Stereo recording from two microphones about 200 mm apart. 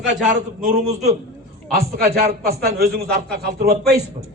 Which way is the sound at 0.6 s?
35° right (ahead or behind).